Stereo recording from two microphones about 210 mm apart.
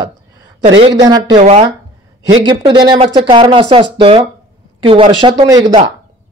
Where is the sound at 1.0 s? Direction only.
20° right (ahead or behind).